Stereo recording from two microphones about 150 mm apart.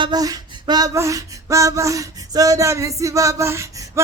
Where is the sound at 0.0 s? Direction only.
25° right (ahead or behind).